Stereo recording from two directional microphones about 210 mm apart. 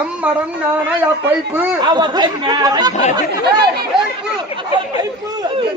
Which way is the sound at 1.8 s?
20° right (ahead or behind).